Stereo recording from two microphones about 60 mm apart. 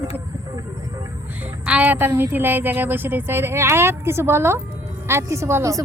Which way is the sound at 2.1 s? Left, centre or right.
Right.